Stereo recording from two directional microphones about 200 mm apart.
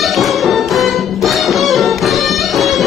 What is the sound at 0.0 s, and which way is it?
Music, centre (ahead or behind).